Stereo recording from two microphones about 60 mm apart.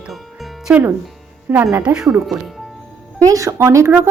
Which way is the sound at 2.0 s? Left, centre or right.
Centre.